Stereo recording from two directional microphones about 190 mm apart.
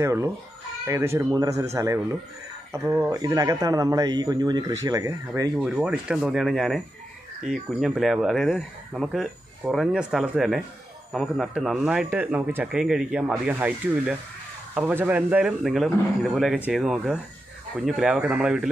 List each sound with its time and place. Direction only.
0.0 s a man's voice: 15° right (ahead or behind)
5.6 s speech: 5° right (ahead or behind)
7.8 s speech: centre (ahead or behind)